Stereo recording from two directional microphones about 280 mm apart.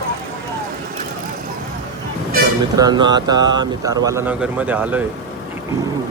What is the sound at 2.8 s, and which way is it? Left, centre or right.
Speech, centre.